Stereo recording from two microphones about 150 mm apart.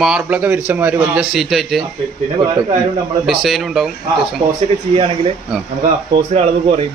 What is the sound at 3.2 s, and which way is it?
Speech, centre (ahead or behind).